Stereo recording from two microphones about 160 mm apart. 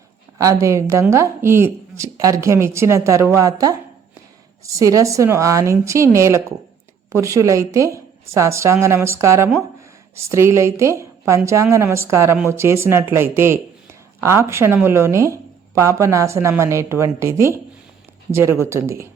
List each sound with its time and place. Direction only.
0.3 s a woman's voice: 20° right (ahead or behind)